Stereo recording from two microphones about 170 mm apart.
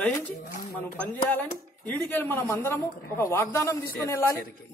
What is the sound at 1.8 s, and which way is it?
A woman's voice, 10° left (ahead or behind).